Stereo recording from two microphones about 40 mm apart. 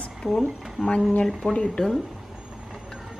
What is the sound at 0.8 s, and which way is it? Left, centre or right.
Speech, centre.